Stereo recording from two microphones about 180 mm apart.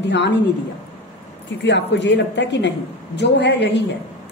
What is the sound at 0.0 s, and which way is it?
Speech, 80° left.